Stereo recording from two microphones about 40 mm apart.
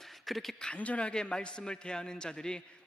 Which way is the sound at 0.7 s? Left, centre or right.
Left.